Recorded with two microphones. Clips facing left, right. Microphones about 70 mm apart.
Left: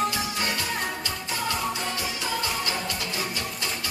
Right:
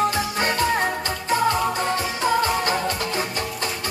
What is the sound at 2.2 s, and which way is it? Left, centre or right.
Music, right.